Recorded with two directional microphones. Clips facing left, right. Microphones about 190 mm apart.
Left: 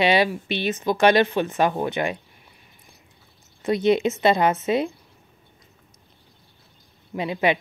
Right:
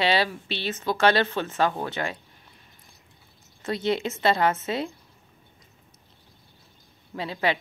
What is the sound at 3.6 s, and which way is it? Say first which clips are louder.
Speech: left 7 dB; 15° left (ahead or behind).